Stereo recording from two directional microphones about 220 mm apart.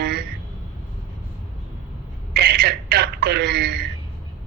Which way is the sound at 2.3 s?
45° right (ahead or behind).